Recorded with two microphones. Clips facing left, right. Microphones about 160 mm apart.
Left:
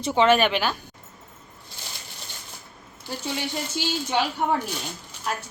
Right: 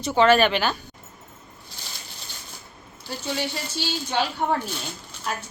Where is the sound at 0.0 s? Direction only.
25° left (ahead or behind).